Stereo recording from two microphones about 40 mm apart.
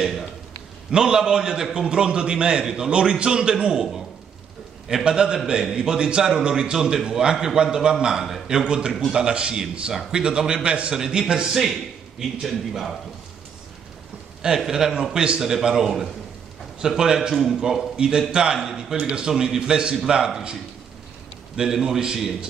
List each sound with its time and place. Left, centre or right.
0.9 s a man's voice: centre
12.2 s a man's voice: centre
14.7 s a man's voice: centre
21.5 s a man's voice: centre